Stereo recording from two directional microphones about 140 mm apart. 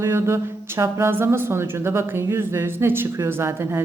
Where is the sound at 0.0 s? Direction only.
20° right (ahead or behind).